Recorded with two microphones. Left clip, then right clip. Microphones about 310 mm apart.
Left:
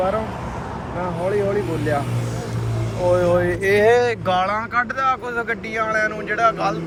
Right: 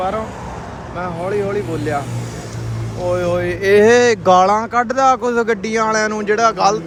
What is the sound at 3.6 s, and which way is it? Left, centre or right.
Speech, right.